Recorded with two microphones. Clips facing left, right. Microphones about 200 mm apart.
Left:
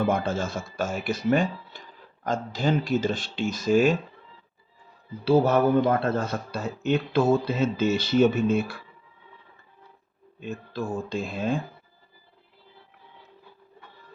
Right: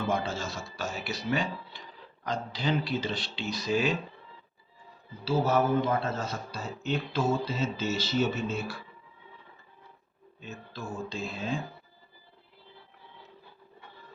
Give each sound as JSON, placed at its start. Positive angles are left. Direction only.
{"t": 0.0, "sound": "speech", "side_deg": 55}
{"t": 5.2, "sound": "speech", "side_deg": 60}
{"t": 10.4, "sound": "speech", "side_deg": 55}